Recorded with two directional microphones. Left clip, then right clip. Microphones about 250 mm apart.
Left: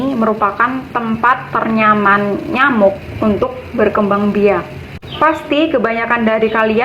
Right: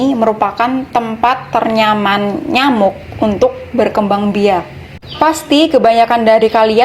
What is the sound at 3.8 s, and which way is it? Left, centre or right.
A woman's voice, right.